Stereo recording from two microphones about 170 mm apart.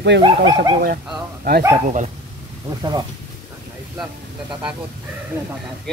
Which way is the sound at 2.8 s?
25° right (ahead or behind).